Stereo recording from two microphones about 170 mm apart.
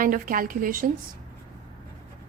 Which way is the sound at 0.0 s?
55° right (ahead or behind).